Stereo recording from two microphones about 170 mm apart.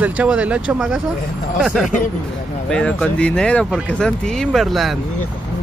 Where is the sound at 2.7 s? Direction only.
5° left (ahead or behind).